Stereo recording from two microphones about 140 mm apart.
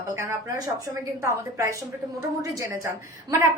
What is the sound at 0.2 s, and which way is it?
A woman's voice, 20° right (ahead or behind).